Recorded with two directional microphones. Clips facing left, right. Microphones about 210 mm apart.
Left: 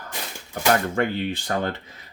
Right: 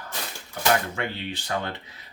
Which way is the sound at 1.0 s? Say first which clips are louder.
Left 7 dB; 50° left (ahead or behind).